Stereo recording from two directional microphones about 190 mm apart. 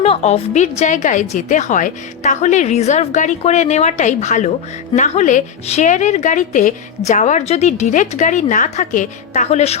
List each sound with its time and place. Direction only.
0.0 s a woman's voice: 35° left (ahead or behind)